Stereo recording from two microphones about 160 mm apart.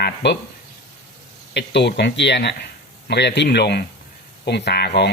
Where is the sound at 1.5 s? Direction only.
90° left.